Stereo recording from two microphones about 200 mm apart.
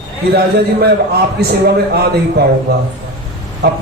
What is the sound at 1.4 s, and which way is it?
A man's voice, 55° right (ahead or behind).